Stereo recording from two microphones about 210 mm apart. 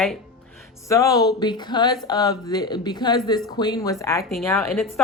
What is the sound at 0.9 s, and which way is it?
A woman's voice, 15° left (ahead or behind).